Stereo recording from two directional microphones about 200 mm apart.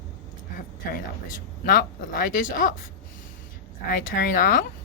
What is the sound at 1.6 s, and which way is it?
A woman's voice, 45° left (ahead or behind).